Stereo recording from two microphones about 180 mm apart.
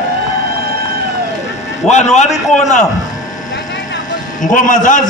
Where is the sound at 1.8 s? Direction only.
40° left (ahead or behind).